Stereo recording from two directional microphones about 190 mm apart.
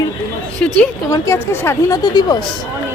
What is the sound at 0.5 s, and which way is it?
A woman's voice, 5° left (ahead or behind).